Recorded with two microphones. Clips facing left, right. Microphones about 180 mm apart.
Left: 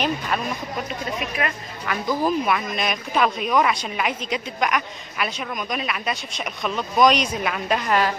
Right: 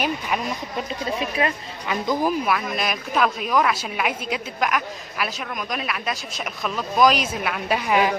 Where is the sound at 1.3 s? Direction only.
25° right (ahead or behind).